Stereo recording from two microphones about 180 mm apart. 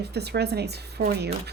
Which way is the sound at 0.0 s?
65° right (ahead or behind).